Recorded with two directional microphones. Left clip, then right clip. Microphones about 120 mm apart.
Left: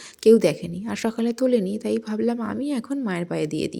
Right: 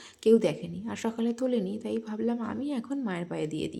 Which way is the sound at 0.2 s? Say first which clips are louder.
Left 7 dB; 40° left (ahead or behind).